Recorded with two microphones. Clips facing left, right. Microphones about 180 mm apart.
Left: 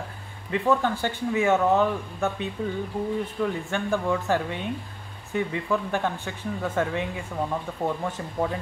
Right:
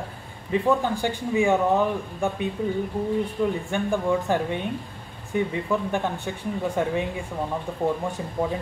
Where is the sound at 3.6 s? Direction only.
15° right (ahead or behind).